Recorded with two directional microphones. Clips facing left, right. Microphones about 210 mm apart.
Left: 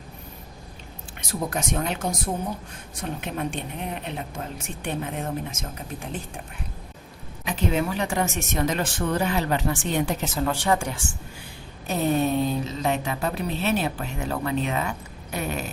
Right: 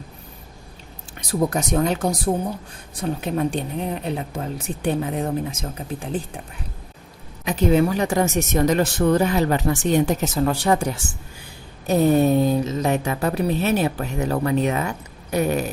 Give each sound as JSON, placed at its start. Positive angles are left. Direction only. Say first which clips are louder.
{"t": 1.3, "sound": "speech", "louder": "right 6 dB", "side_deg": -40}
{"t": 7.4, "sound": "speech", "louder": "right 7 dB", "side_deg": -40}
{"t": 15.3, "sound": "a sound", "louder": "right 9 dB", "side_deg": -40}